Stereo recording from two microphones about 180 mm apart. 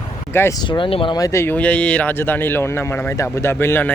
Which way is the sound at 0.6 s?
25° left (ahead or behind).